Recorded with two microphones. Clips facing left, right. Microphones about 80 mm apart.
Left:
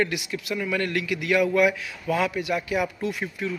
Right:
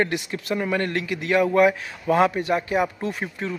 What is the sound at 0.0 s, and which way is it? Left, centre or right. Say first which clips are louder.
A man's voice: right 2 dB; right.